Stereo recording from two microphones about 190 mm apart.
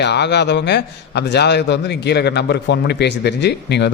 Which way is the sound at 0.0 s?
65° left (ahead or behind).